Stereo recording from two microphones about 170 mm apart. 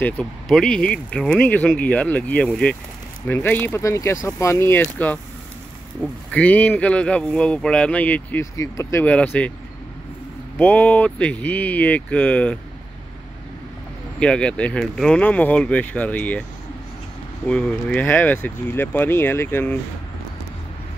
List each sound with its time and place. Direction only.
0.0 s speech: 5° left (ahead or behind)
6.0 s speech: 10° right (ahead or behind)
6.3 s speech: 10° left (ahead or behind)
10.6 s speech: 10° left (ahead or behind)
14.2 s speech: 5° left (ahead or behind)
17.5 s speech: 5° left (ahead or behind)